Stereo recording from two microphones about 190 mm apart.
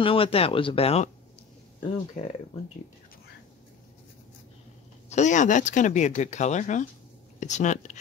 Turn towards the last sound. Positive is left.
turn(degrees=40)  # may be behind; listen again after turning